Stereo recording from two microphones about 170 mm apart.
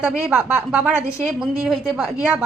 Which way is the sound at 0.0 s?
10° right (ahead or behind).